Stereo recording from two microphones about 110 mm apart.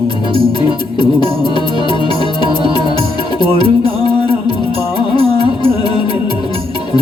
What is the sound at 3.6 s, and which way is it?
Music, 60° right (ahead or behind).